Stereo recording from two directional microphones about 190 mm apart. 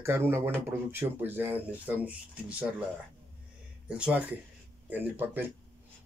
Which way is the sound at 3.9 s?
5° right (ahead or behind).